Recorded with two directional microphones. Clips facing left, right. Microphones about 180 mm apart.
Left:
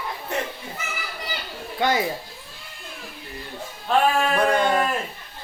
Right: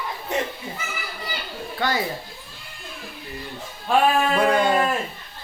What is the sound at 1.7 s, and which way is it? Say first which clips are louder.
Speech: left 3 dB; 20° left (ahead or behind).